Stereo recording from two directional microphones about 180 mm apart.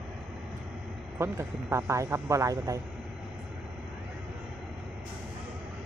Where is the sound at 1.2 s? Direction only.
15° right (ahead or behind).